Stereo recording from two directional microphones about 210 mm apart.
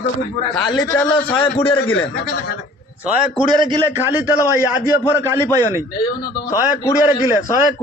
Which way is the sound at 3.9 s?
10° right (ahead or behind).